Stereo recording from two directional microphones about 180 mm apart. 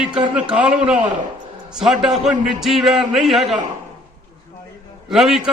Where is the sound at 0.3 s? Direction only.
5° right (ahead or behind).